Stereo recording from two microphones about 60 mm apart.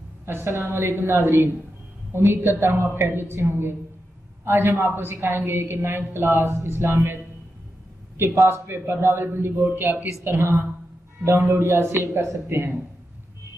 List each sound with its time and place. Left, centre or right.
0.2 s a man's voice: right
8.5 s a man's voice: right